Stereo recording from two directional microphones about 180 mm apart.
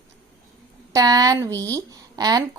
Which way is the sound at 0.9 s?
20° right (ahead or behind).